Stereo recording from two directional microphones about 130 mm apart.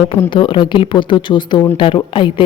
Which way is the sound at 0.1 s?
40° left (ahead or behind).